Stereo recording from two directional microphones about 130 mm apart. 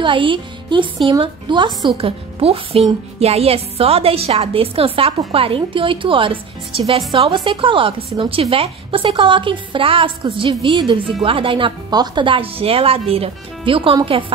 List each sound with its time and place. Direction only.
0.0 s a woman's voice: 40° right (ahead or behind)